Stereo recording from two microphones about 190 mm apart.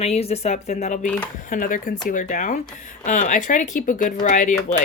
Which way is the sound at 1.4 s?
45° left (ahead or behind).